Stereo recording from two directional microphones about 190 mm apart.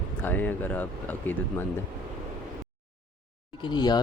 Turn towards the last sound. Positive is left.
turn(degrees=25)  # may be behind; listen again after turning